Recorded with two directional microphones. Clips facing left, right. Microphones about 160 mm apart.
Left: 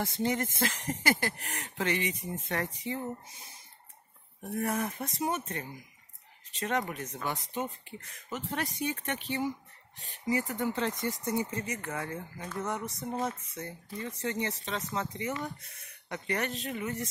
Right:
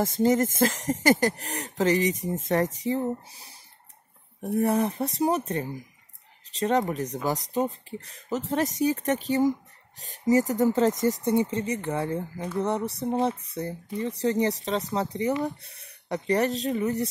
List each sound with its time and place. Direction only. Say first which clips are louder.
0.0 s speech: right 9 dB; 45° right (ahead or behind)
4.6 s speech: right 8 dB; 30° right (ahead or behind)
11.2 s speech: right 8 dB; 25° right (ahead or behind)